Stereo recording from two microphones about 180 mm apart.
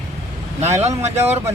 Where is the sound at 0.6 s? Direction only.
35° right (ahead or behind).